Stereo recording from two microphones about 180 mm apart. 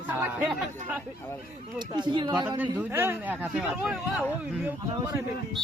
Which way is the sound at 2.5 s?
15° right (ahead or behind).